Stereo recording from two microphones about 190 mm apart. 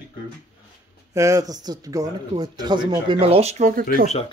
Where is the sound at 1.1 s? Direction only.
15° right (ahead or behind); by 3.8 s 40° right (ahead or behind).